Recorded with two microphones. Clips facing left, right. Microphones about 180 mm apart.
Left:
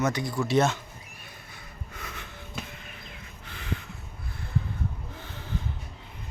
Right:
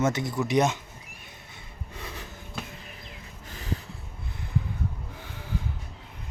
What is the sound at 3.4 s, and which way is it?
Snort, 40° right (ahead or behind).